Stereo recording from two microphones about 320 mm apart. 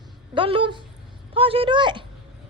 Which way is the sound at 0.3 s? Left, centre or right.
Centre.